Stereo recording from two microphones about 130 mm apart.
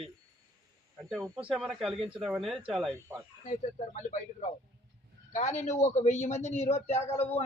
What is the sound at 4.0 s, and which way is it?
Speech, 75° left (ahead or behind).